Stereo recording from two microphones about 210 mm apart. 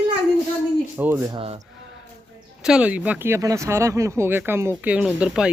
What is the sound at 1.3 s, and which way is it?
Speech, 30° right (ahead or behind).